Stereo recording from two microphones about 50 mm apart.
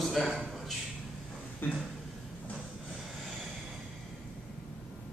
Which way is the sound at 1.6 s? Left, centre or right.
Left.